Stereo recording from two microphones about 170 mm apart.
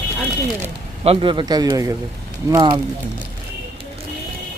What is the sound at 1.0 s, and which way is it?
A man's voice, 30° right (ahead or behind).